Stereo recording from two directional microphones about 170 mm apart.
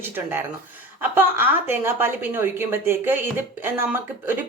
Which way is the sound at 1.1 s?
10° right (ahead or behind).